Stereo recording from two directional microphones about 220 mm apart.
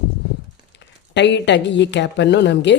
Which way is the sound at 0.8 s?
55° left (ahead or behind).